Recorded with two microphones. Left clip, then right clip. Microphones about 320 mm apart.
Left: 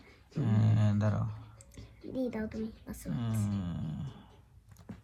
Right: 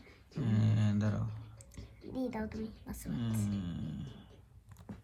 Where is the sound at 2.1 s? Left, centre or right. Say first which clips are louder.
Left 3 dB; right.